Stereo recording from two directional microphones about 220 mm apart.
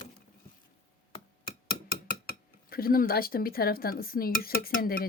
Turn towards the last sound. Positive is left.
turn(degrees=40)  # may be behind; listen again after turning